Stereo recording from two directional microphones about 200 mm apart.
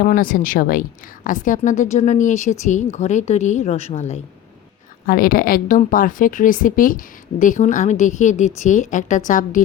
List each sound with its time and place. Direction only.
0.0 s a woman's voice: 45° left (ahead or behind)
5.0 s a woman's voice: 45° left (ahead or behind)